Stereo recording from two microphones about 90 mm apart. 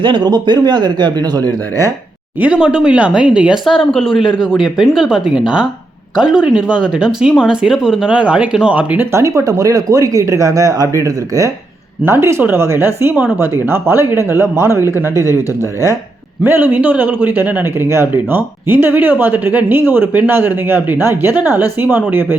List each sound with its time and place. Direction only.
0.0 s speech: 60° right (ahead or behind)
2.4 s speech: 15° right (ahead or behind)
9.1 s speech: 35° right (ahead or behind)
12.0 s a man's voice: 30° right (ahead or behind)
16.4 s a man's voice: 20° right (ahead or behind)